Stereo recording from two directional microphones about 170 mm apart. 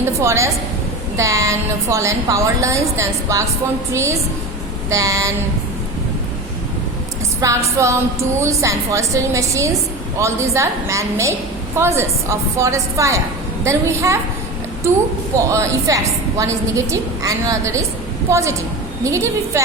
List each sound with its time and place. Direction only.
0.2 s a woman's voice: 15° right (ahead or behind)
4.9 s a sound: 20° right (ahead or behind)
7.4 s a woman's voice: 15° right (ahead or behind)